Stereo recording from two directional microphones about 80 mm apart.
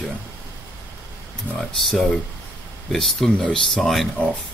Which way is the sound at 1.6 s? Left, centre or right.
Centre.